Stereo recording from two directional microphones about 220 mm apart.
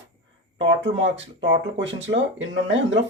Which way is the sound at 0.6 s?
55° right (ahead or behind).